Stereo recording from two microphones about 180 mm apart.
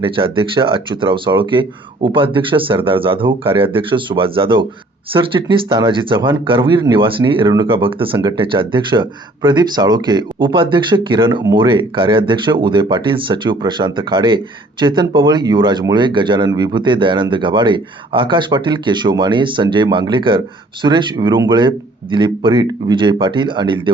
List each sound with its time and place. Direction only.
0.0 s speech: 30° right (ahead or behind)